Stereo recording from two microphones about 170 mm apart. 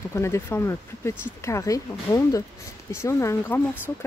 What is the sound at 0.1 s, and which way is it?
Speech, 15° left (ahead or behind).